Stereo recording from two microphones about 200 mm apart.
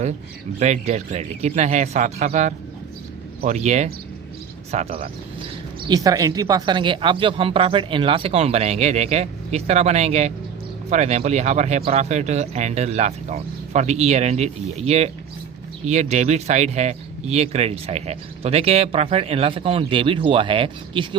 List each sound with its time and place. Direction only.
0.6 s speech: 35° right (ahead or behind)
5.9 s speech: 15° right (ahead or behind)